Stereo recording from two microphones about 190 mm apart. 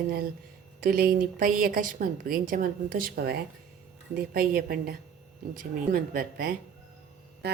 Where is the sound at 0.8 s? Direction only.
50° right (ahead or behind).